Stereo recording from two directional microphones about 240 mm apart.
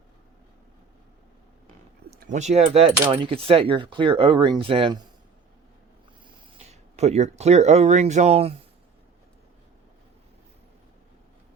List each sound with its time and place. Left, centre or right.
2.0 s speech: right
6.6 s speech: right